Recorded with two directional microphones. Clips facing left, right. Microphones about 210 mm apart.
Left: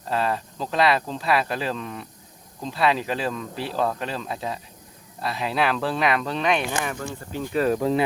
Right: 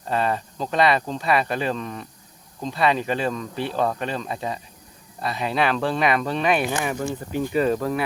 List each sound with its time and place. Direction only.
0.1 s speech: centre (ahead or behind)
7.8 s speech: 20° left (ahead or behind)